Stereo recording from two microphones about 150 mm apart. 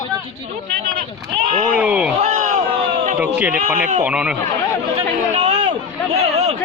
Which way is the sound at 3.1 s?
10° right (ahead or behind).